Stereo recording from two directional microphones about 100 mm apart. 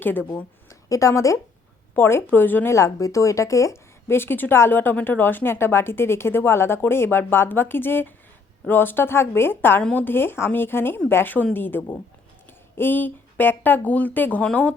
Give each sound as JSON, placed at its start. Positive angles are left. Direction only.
{"t": 0.0, "sound": "speech", "side_deg": 20}
{"t": 0.7, "sound": "a woman's voice", "side_deg": 35}